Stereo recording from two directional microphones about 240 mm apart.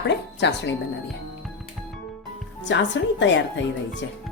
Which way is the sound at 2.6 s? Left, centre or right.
Left.